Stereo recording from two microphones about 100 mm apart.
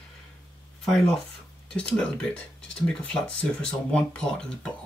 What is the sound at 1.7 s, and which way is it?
Speech, 10° left (ahead or behind).